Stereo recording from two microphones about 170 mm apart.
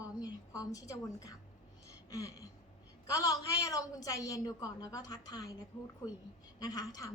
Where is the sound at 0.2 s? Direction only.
20° left (ahead or behind).